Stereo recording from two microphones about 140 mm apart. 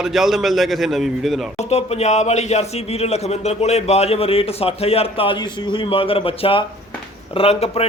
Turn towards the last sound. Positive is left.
turn(degrees=45)  # may be behind; listen again after turning